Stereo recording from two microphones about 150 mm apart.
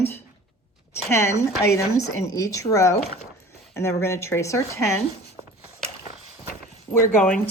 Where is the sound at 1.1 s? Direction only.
20° left (ahead or behind).